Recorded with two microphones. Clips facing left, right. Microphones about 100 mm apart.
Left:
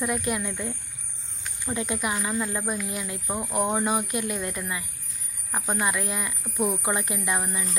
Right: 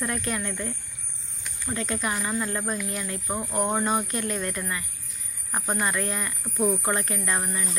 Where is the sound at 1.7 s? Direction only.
15° left (ahead or behind).